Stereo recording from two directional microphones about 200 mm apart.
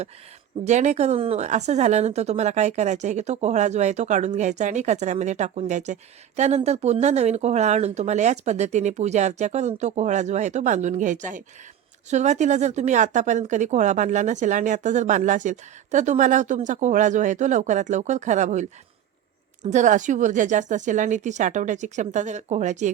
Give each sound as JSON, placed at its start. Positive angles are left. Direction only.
{"t": 0.6, "sound": "a woman's voice", "side_deg": -35}